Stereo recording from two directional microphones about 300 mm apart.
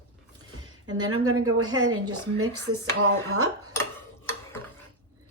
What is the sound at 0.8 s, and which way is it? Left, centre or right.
Speech, right.